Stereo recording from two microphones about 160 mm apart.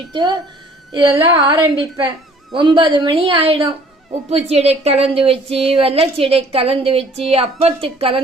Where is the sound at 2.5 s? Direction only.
30° right (ahead or behind).